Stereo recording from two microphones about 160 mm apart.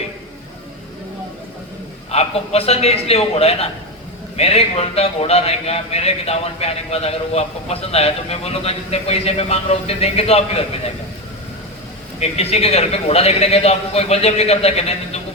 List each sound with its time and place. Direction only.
2.0 s a man's voice: 40° left (ahead or behind)
12.2 s a man's voice: 40° left (ahead or behind)